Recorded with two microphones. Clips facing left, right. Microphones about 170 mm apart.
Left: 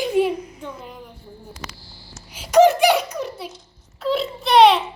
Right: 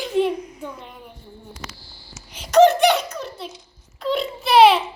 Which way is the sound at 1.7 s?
30° right (ahead or behind).